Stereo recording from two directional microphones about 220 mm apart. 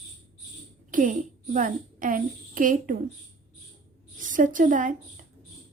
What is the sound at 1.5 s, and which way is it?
A woman's voice, 40° right (ahead or behind).